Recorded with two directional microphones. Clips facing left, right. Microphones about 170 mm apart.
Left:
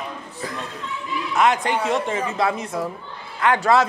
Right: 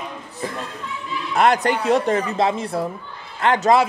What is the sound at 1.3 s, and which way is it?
Speech, 35° right (ahead or behind).